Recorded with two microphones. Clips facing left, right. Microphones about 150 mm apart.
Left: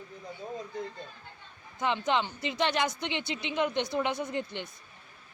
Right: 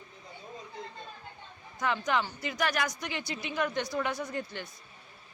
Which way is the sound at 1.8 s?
20° left (ahead or behind).